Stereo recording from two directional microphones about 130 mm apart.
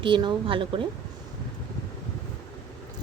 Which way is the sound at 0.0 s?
35° right (ahead or behind).